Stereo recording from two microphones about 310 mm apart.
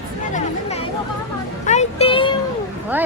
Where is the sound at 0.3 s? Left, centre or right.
Centre.